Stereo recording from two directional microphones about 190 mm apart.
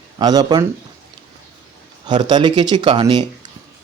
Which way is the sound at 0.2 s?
20° right (ahead or behind).